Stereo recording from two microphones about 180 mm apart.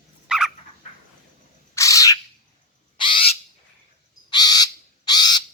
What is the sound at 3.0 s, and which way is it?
Owl, 30° left (ahead or behind).